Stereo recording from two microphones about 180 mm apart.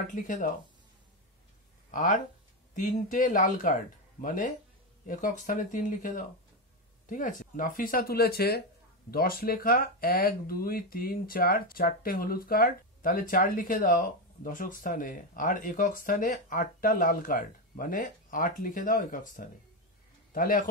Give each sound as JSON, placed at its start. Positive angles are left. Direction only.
{"t": 0.1, "sound": "speech", "side_deg": 45}
{"t": 1.9, "sound": "speech", "side_deg": 45}